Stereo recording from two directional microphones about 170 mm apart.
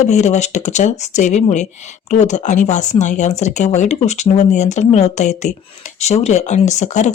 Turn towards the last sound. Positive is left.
turn(degrees=45)  # may be behind; listen again after turning